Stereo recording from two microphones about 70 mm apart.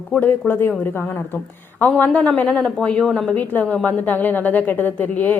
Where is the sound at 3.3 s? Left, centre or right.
Left.